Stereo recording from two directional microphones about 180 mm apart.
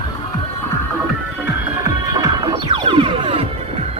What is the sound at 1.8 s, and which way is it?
Music, 20° right (ahead or behind).